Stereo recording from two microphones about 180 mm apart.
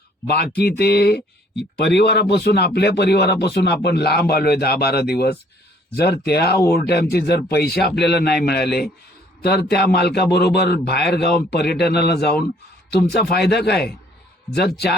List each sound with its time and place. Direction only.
0.3 s a man's voice: 65° left (ahead or behind)